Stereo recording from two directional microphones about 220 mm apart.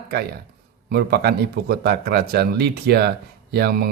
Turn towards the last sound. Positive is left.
turn(degrees=-45)  # may be behind; listen again after turning